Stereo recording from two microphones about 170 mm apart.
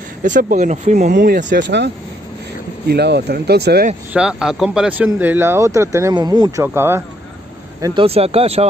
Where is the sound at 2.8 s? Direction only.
80° right.